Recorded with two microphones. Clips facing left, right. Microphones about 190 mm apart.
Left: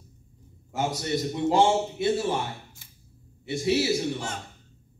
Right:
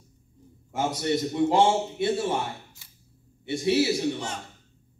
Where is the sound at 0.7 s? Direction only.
25° right (ahead or behind).